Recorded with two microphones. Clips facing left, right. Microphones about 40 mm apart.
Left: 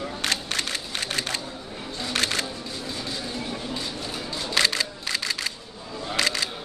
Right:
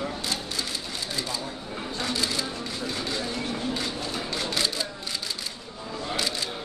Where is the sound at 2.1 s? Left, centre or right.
Left.